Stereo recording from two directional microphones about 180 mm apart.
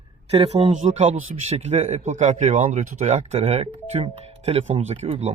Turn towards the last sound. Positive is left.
turn(degrees=-35)  # may be behind; listen again after turning